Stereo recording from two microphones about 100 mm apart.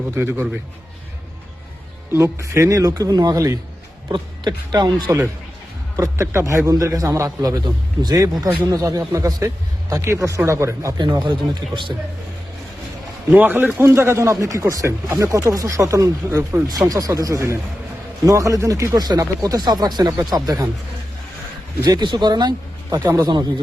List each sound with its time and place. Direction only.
0.2 s speech: 20° right (ahead or behind)
2.1 s speech: 30° right (ahead or behind)
4.1 s speech: 50° right (ahead or behind)
6.0 s speech: 30° right (ahead or behind)
10.9 s speech: 45° right (ahead or behind)
13.3 s a man's voice: 20° right (ahead or behind); by 20.7 s 35° right (ahead or behind)
21.8 s speech: 45° right (ahead or behind)